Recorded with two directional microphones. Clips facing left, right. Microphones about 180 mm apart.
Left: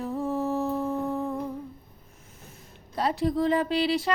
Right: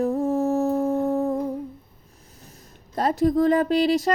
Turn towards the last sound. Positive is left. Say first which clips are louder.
# right 5 dB
turn(degrees=-45)  # may be behind; listen again after turning